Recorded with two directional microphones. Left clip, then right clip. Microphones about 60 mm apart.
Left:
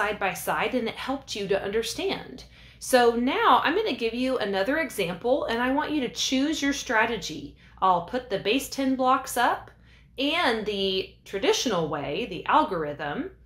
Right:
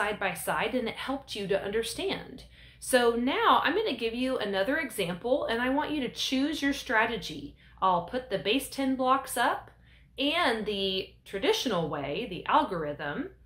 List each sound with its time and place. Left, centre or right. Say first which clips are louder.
0.0 s a woman's voice: left 3 dB; left